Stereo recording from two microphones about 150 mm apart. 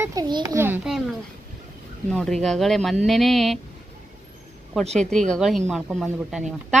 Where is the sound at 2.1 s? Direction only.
5° left (ahead or behind).